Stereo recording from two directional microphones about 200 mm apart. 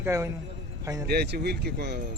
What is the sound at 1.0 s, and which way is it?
Speech, 55° right (ahead or behind).